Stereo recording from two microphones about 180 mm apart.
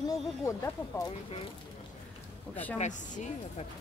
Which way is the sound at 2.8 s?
45° left (ahead or behind).